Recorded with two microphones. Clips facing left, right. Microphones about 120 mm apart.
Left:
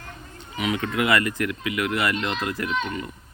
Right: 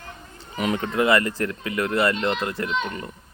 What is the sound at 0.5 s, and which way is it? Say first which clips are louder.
Speech: right 2 dB; 40° right (ahead or behind).